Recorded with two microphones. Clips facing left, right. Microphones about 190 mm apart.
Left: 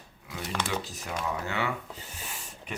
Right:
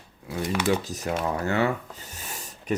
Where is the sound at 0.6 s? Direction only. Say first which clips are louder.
Right 9 dB; 45° right (ahead or behind).